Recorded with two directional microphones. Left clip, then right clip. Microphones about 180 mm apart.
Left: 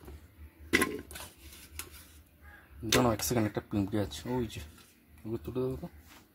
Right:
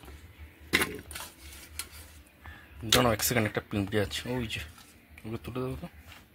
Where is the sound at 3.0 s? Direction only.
Centre (ahead or behind).